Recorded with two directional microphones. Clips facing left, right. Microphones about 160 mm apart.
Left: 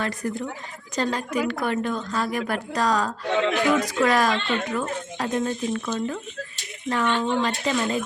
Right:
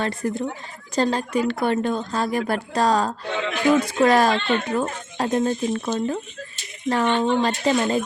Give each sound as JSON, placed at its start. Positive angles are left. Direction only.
{"t": 0.0, "sound": "speech", "side_deg": -25}